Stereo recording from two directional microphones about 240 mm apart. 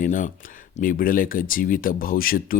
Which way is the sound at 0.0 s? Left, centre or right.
Left.